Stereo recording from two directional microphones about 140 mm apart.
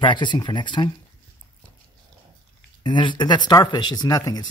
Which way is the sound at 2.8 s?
35° left (ahead or behind).